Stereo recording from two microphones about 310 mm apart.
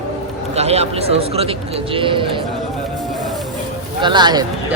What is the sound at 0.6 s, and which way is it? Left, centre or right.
Speech, centre.